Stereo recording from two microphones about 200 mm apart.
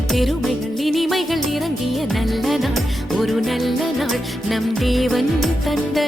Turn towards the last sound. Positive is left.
turn(degrees=0)  # may be behind; listen again after turning